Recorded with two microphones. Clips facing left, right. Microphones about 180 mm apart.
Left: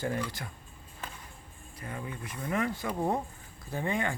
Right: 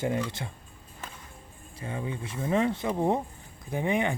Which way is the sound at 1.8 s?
25° right (ahead or behind).